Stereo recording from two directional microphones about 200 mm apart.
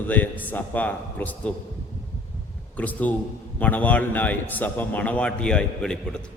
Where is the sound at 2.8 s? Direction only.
5° left (ahead or behind).